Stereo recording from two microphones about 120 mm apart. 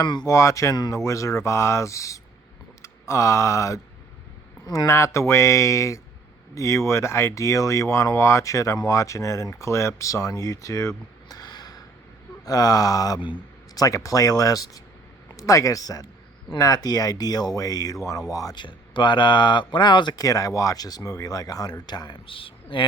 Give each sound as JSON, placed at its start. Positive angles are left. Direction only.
{"t": 0.0, "sound": "speech", "side_deg": 35}
{"t": 0.3, "sound": "speech", "side_deg": 25}
{"t": 18.6, "sound": "speech", "side_deg": 40}